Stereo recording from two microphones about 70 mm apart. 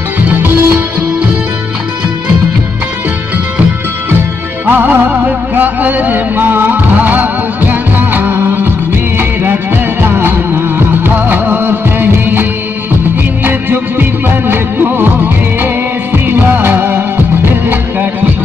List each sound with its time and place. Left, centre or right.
0.3 s music: right
4.6 s music: right
10.0 s music: right
15.6 s music of bollywood: right